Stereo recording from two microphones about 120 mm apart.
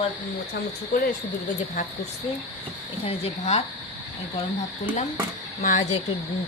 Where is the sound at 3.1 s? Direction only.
60° left (ahead or behind).